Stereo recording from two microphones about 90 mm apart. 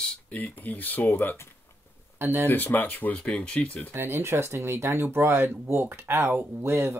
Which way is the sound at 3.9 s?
30° right (ahead or behind).